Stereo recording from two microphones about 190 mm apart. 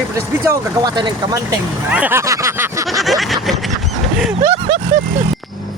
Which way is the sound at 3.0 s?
Centre (ahead or behind).